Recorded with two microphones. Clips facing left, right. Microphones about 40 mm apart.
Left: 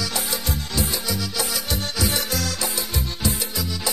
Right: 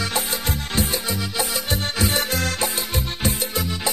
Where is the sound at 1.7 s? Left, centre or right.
Right.